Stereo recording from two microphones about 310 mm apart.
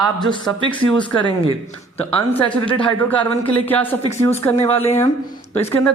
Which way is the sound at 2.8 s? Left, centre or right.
Centre.